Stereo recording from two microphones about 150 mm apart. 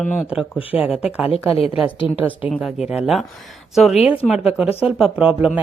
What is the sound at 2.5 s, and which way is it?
Speech, 5° right (ahead or behind).